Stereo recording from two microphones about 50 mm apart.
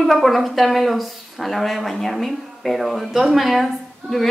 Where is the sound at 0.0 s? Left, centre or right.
Centre.